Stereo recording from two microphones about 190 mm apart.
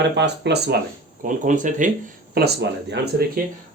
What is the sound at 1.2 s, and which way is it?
Speech, 45° right (ahead or behind).